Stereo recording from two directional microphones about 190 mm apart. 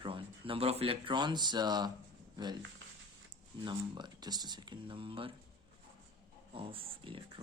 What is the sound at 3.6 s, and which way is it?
Speech, 25° right (ahead or behind).